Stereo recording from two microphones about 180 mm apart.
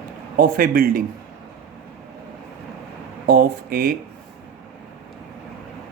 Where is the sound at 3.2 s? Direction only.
55° right (ahead or behind).